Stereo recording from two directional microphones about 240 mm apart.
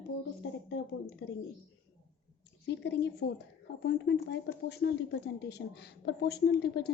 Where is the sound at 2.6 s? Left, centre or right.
Left.